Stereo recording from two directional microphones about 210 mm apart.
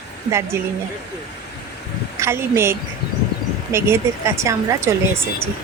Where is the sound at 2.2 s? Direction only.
10° right (ahead or behind).